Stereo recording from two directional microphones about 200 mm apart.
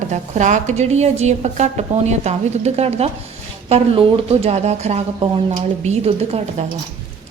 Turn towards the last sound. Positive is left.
turn(degrees=-30)  # may be behind; listen again after turning